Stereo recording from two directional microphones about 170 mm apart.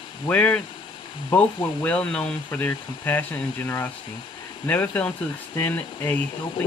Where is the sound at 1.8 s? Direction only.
5° left (ahead or behind).